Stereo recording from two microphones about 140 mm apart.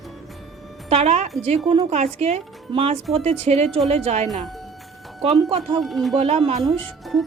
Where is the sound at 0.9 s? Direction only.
50° right (ahead or behind).